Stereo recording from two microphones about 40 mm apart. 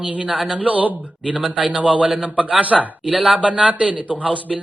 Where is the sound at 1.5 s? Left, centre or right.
Right.